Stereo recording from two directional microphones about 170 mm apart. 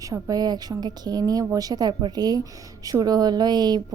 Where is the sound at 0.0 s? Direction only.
20° right (ahead or behind).